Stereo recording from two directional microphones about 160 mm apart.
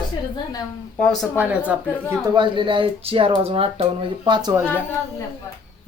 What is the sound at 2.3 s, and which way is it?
Speech, 30° right (ahead or behind).